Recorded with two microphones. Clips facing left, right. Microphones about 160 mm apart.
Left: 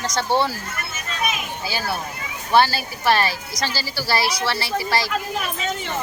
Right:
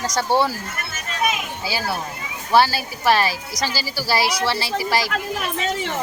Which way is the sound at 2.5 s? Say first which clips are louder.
Right 1 dB; 10° right (ahead or behind).